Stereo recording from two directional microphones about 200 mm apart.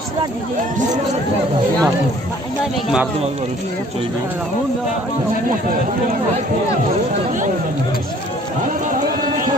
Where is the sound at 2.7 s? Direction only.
5° right (ahead or behind).